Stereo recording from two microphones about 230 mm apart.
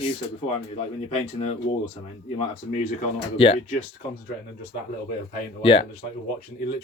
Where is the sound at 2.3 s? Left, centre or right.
Left.